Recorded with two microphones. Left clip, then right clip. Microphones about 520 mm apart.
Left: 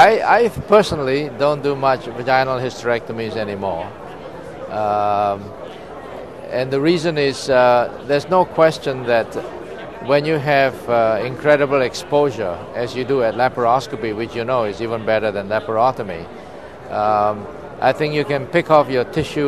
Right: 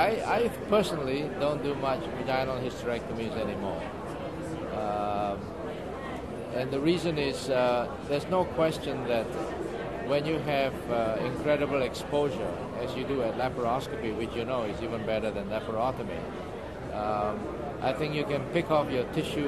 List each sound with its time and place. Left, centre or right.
0.0 s speech: left
4.8 s speech: left
6.5 s speech: left